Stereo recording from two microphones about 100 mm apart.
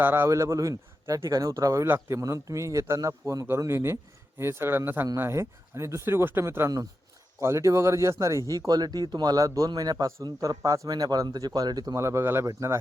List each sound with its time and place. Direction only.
0.0 s a man's voice: 25° right (ahead or behind); by 11.9 s 40° right (ahead or behind)
11.9 s a man's voice: 30° right (ahead or behind)